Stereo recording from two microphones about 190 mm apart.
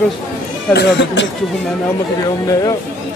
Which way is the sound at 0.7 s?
70° left (ahead or behind).